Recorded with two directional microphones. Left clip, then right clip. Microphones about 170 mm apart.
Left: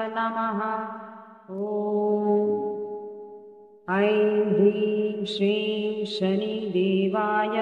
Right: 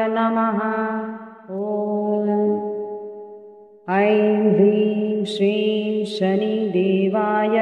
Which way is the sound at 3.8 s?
35° right (ahead or behind).